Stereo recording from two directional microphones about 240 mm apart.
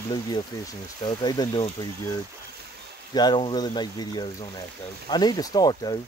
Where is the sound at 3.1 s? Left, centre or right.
Centre.